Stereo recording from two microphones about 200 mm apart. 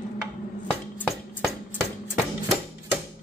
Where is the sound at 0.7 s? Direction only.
Centre (ahead or behind).